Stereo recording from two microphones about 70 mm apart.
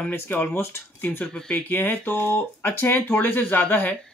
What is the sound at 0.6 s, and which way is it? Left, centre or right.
Speech, left.